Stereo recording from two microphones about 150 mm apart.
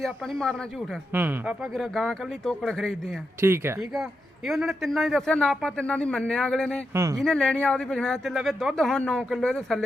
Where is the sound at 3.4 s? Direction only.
15° right (ahead or behind).